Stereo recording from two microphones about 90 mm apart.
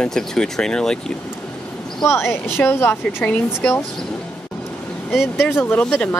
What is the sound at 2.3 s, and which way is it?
Speech, 25° left (ahead or behind).